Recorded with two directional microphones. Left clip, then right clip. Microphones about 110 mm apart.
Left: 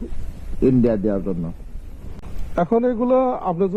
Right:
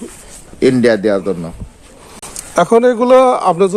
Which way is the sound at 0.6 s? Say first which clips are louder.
Right 7 dB; 5° left (ahead or behind).